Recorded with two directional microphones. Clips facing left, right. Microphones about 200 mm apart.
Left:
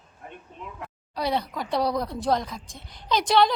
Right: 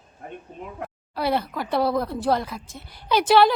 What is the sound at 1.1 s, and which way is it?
Speech, 5° right (ahead or behind).